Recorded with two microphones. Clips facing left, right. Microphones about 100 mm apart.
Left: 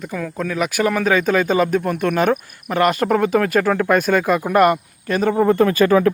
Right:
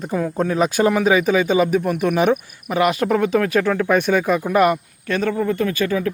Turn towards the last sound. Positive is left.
turn(degrees=50)  # may be behind; listen again after turning